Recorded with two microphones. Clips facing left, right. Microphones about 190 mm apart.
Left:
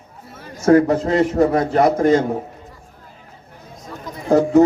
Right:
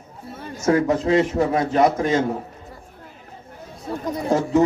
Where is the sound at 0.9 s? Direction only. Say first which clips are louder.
Left 1 dB; 45° left (ahead or behind).